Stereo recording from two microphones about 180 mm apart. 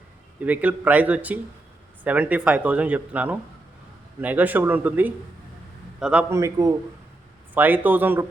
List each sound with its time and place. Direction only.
0.3 s a man's voice: 10° right (ahead or behind)
6.3 s speech: 20° right (ahead or behind)